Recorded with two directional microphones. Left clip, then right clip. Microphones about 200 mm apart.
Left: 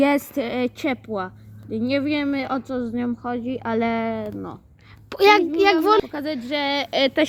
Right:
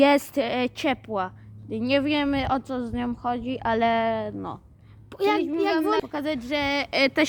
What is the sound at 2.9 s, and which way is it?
Speech, 20° right (ahead or behind).